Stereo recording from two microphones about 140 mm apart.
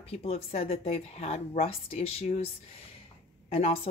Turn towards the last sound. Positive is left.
turn(degrees=45)  # may be behind; listen again after turning